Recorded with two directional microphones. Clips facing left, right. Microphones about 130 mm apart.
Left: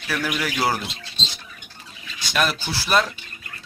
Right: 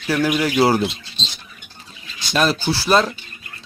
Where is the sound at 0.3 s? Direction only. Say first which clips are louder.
Right 8 dB; 25° right (ahead or behind).